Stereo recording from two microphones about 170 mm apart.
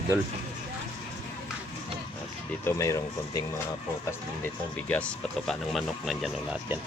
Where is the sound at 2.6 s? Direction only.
20° left (ahead or behind).